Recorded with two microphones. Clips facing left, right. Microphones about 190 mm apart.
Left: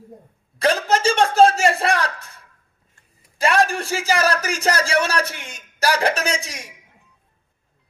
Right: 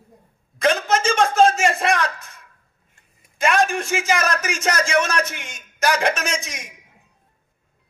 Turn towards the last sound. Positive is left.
turn(degrees=35)  # may be behind; listen again after turning